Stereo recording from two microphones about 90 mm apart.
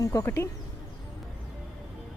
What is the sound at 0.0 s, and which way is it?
Speech, 40° left (ahead or behind).